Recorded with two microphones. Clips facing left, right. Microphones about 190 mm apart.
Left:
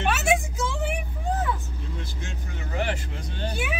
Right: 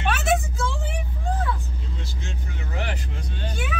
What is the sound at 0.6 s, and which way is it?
Vehicle, 20° left (ahead or behind).